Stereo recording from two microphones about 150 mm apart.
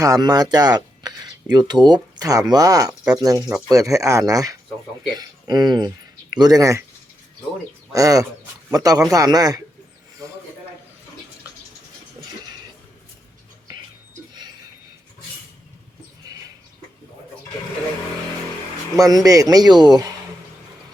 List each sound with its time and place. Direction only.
0.0 s a man's voice: 25° right (ahead or behind)
7.9 s a man's voice: 20° right (ahead or behind)
10.2 s a sound: 20° right (ahead or behind)
18.9 s a man's voice: 25° right (ahead or behind)